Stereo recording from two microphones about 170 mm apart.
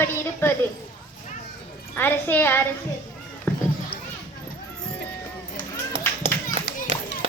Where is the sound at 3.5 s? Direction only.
5° left (ahead or behind).